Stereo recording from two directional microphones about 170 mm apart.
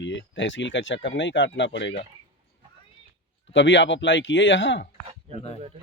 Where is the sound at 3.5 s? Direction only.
90° left.